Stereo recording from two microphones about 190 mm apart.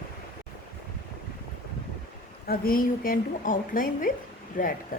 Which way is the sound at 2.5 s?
50° left (ahead or behind).